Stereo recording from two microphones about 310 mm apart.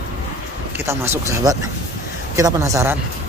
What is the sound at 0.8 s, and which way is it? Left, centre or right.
Speech, centre.